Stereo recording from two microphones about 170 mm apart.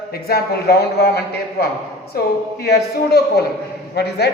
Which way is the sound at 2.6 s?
70° left (ahead or behind).